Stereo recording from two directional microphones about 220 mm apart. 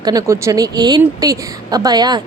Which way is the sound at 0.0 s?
15° right (ahead or behind).